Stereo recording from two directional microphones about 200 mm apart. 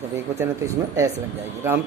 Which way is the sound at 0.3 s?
15° right (ahead or behind).